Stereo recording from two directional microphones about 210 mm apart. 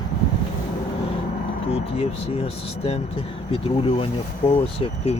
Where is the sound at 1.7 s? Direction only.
30° left (ahead or behind).